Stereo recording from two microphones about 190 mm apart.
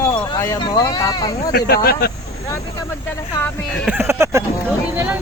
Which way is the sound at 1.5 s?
55° left (ahead or behind).